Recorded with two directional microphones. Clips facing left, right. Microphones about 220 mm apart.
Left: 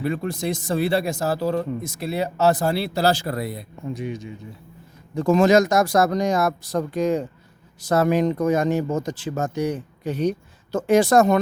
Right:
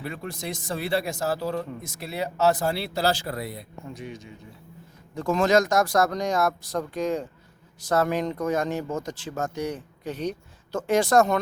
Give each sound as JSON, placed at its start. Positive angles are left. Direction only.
{"t": 0.0, "sound": "speech", "side_deg": 35}
{"t": 3.9, "sound": "speech", "side_deg": 10}